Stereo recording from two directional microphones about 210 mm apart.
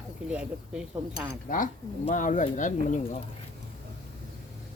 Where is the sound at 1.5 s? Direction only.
40° left (ahead or behind).